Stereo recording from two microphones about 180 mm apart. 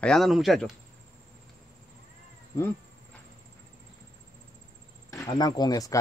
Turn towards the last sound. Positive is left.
turn(degrees=20)  # may be behind; listen again after turning